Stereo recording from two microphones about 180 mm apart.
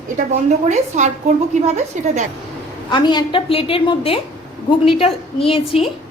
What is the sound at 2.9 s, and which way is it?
A woman's voice, 25° left (ahead or behind).